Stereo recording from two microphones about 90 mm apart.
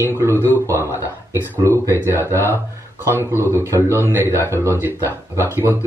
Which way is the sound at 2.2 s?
30° right (ahead or behind).